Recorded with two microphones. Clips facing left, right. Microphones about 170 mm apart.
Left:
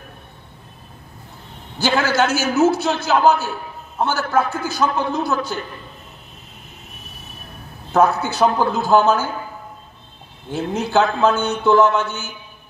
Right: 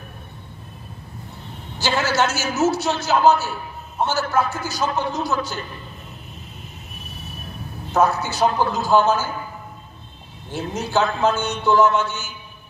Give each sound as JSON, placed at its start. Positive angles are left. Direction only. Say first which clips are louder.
{"t": 1.9, "sound": "a man's voice", "louder": "left 3 dB", "side_deg": 55}
{"t": 7.9, "sound": "a man's voice", "louder": "left 3 dB", "side_deg": 55}
{"t": 10.5, "sound": "a man's voice", "louder": "left 4 dB", "side_deg": 55}